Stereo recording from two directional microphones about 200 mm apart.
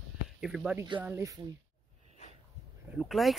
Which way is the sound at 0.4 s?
Centre (ahead or behind).